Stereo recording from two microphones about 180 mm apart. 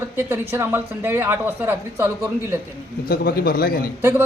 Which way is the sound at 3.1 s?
60° left (ahead or behind).